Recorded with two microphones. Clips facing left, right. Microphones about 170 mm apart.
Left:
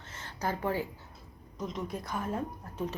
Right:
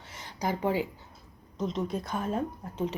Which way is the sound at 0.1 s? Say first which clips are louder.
Right 3 dB; 15° right (ahead or behind).